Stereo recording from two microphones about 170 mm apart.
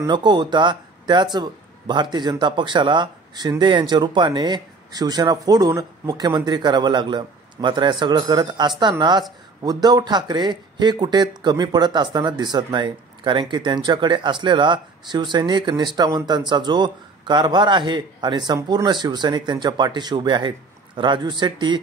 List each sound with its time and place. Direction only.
0.0 s speech: 25° right (ahead or behind)